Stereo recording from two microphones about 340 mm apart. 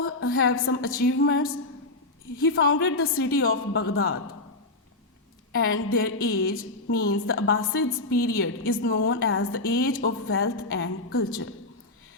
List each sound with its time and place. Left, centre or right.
0.0 s a woman's voice: left
5.5 s a woman's voice: left